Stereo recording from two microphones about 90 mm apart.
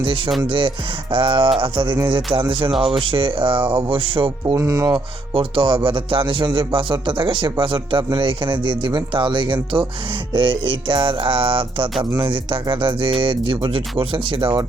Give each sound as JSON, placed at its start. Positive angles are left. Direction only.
{"t": 0.4, "sound": "speech", "side_deg": -70}
{"t": 4.5, "sound": "speech", "side_deg": -35}
{"t": 4.9, "sound": "speech", "side_deg": -70}